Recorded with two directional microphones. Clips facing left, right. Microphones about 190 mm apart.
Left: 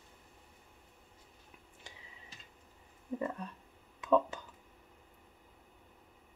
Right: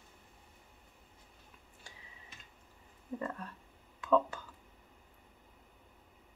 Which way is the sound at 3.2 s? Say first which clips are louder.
Left 3 dB; 20° left (ahead or behind).